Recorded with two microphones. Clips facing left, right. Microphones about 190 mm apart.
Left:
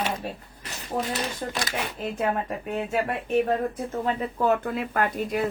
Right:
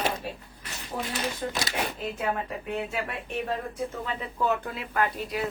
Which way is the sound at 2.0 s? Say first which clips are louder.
Left 3 dB; 45° left (ahead or behind).